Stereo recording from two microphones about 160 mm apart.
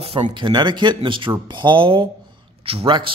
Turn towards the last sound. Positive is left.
turn(degrees=-35)  # may be behind; listen again after turning